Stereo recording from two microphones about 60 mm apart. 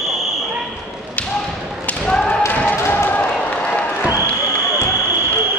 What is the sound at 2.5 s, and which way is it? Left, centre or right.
Basketball bounce, left.